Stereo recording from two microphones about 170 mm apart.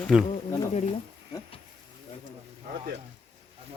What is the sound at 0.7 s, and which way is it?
Speech, 35° left (ahead or behind).